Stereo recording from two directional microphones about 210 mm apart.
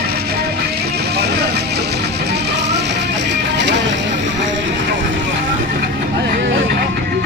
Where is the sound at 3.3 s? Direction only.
55° right (ahead or behind).